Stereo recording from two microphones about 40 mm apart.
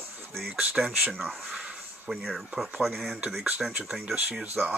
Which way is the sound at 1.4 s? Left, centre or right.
Centre.